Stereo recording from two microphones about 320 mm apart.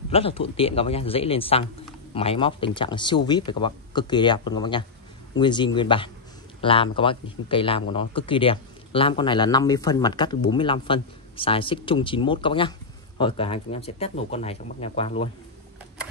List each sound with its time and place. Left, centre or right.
0.1 s a man's voice: centre